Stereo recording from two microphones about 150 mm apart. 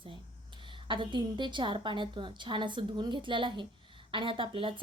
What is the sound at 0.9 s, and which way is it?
Speech, 30° right (ahead or behind).